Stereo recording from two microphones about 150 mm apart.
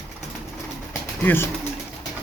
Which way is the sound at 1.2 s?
15° left (ahead or behind).